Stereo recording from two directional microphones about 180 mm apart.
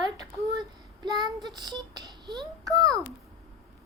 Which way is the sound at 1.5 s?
25° right (ahead or behind).